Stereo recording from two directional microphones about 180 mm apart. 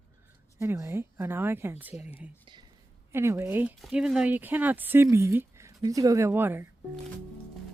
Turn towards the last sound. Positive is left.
turn(degrees=-10)  # may be behind; listen again after turning